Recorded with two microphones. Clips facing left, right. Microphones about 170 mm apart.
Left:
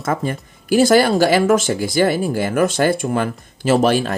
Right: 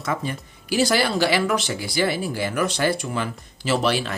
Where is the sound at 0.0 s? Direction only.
50° left (ahead or behind).